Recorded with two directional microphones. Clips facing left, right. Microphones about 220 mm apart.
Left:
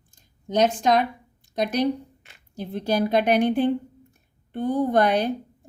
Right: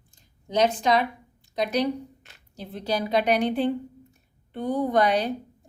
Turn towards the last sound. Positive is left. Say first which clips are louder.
# left 2 dB
turn(degrees=55)  # may be behind; listen again after turning